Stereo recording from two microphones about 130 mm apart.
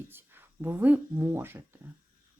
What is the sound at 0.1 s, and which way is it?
Speech, 15° right (ahead or behind).